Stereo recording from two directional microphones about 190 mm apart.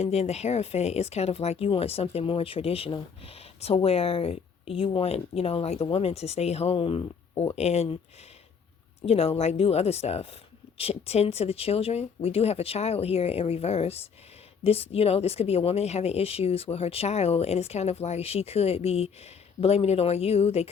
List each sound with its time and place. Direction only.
0.0 s speech: 35° left (ahead or behind)
9.0 s speech: 30° left (ahead or behind)